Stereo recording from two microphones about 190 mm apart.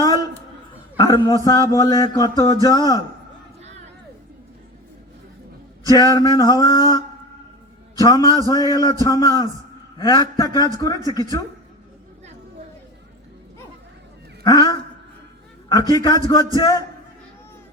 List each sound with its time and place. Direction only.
0.9 s a man's voice: 20° left (ahead or behind)
1.5 s music: 20° left (ahead or behind)
5.9 s music: 20° left (ahead or behind)
14.4 s music: 20° left (ahead or behind)